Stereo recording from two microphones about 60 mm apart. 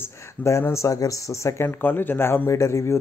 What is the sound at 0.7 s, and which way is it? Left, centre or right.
Speech, left.